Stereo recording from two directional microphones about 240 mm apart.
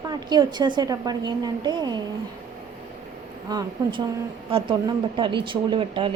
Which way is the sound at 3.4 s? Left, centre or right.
Centre.